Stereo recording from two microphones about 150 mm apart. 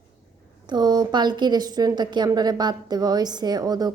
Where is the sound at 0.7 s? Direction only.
25° right (ahead or behind).